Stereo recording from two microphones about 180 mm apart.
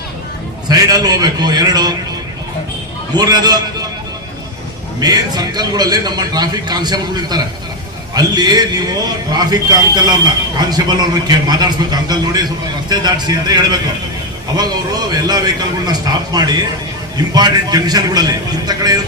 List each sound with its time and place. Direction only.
0.7 s a man's voice: 20° right (ahead or behind)
3.2 s a man's voice: 20° right (ahead or behind)
4.9 s a man's voice: 20° right (ahead or behind)